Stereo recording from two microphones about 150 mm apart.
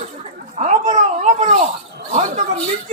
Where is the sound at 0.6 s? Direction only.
55° right (ahead or behind).